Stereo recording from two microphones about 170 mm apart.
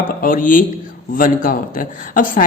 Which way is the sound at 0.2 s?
55° left (ahead or behind).